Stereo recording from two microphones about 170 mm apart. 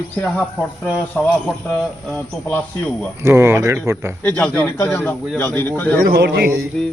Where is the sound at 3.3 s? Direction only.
15° right (ahead or behind).